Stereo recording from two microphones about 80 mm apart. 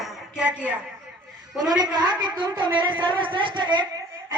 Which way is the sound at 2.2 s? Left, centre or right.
Right.